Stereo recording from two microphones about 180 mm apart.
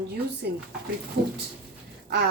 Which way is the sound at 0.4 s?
65° right (ahead or behind).